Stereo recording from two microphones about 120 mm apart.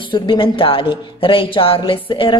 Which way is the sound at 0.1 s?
45° left (ahead or behind).